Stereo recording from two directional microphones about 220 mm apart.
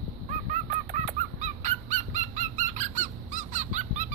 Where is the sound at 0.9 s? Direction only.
35° right (ahead or behind).